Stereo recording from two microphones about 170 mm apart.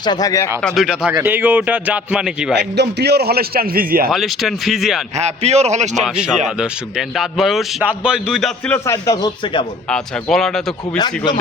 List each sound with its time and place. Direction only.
0.0 s a man's voice: 25° left (ahead or behind)
0.6 s a man's voice: 5° right (ahead or behind)
2.6 s a man's voice: 80° right; by 4.1 s 60° right (ahead or behind)
4.1 s a man's voice: centre (ahead or behind)
5.1 s a man's voice: 40° right (ahead or behind)
7.2 s a man's voice: centre (ahead or behind)
8.7 s a man's voice: 15° left (ahead or behind)
9.9 s a man's voice: 5° left (ahead or behind)
10.9 s a man's voice: 25° left (ahead or behind)